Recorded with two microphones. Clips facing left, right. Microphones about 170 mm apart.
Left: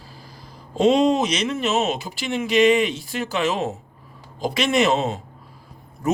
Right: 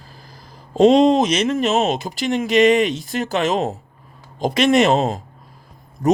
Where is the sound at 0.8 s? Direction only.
40° right (ahead or behind).